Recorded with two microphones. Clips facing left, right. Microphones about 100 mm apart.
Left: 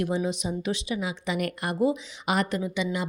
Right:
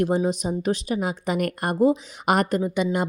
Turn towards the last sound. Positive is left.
turn(degrees=-50)  # may be behind; listen again after turning